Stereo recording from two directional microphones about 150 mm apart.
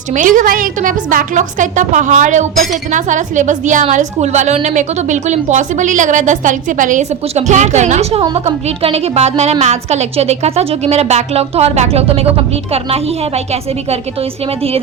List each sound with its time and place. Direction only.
0.1 s a woman's voice: 60° right (ahead or behind); by 14.8 s 40° right (ahead or behind)